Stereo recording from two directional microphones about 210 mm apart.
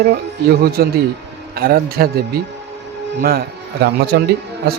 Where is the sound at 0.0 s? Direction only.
50° right (ahead or behind).